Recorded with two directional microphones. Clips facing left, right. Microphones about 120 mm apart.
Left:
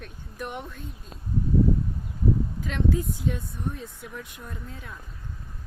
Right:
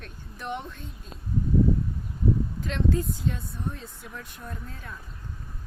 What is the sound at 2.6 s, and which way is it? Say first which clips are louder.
Speech: even; 10° left (ahead or behind).